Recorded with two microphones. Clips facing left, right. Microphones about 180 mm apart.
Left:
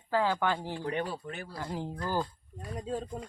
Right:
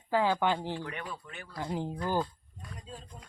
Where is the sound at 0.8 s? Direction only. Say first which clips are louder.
Left 7 dB; 35° left (ahead or behind).